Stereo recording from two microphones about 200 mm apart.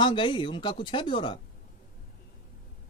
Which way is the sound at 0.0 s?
25° left (ahead or behind).